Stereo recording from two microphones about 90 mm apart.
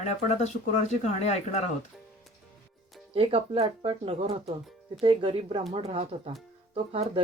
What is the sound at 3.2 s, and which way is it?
Speech, 90° right.